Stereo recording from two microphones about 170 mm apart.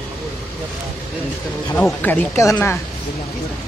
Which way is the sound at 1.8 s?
10° left (ahead or behind).